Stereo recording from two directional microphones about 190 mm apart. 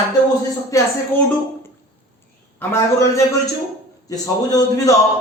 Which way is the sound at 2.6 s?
15° left (ahead or behind).